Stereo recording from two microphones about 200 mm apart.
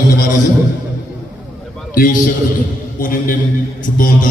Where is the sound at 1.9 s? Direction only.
45° left (ahead or behind).